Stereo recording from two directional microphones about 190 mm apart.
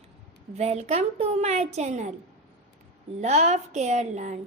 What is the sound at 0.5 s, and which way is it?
A woman's voice, 35° right (ahead or behind).